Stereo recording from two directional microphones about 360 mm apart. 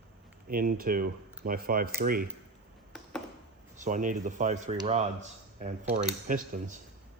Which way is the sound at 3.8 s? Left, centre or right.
Right.